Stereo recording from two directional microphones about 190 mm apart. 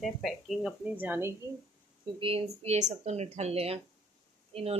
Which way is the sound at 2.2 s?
30° right (ahead or behind).